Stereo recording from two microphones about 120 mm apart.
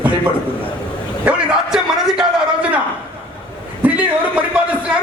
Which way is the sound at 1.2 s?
5° right (ahead or behind).